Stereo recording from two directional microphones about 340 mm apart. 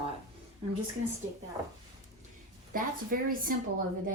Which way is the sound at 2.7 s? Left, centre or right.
Right.